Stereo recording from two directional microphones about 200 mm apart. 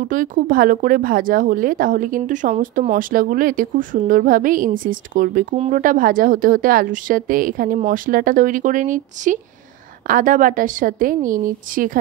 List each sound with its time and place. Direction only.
0.0 s speech: 40° right (ahead or behind)